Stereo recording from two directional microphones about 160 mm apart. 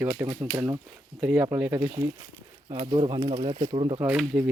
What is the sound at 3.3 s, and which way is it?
Speech, 35° right (ahead or behind).